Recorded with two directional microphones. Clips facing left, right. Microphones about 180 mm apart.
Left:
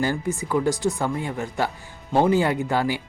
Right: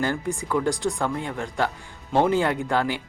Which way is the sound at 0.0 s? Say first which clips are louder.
Left 1 dB; 5° left (ahead or behind).